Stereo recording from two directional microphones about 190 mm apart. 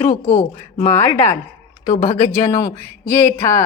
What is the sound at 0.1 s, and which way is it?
Speech, 40° left (ahead or behind).